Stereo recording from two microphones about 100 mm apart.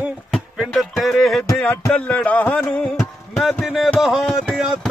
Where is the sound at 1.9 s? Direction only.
10° left (ahead or behind).